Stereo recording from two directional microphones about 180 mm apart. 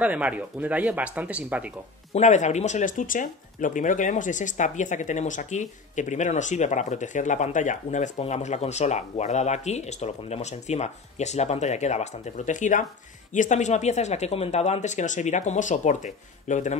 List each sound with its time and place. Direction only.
0.0 s speech: 10° right (ahead or behind)
2.1 s speech: 40° left (ahead or behind)